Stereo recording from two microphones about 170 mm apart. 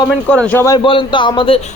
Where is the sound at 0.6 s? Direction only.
25° left (ahead or behind).